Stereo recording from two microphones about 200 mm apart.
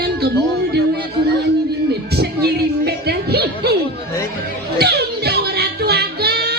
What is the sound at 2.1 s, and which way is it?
Music, 50° right (ahead or behind).